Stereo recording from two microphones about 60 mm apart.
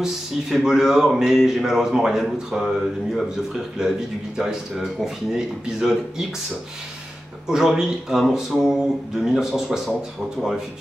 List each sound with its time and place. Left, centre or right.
0.0 s speech: centre
7.4 s speech: centre